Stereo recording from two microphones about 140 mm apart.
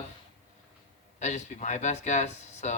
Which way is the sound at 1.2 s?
60° left (ahead or behind).